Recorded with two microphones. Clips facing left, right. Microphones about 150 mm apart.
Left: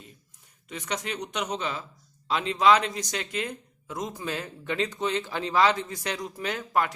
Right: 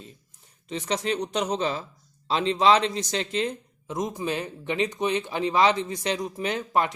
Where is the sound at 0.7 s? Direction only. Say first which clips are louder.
Right 6 dB; 30° right (ahead or behind).